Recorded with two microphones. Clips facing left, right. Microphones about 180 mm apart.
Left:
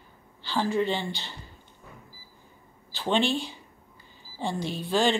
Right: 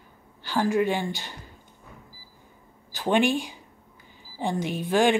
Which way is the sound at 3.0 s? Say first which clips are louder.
Right 3 dB; 15° right (ahead or behind).